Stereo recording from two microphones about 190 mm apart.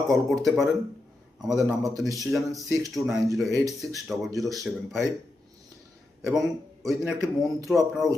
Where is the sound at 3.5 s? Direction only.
15° right (ahead or behind).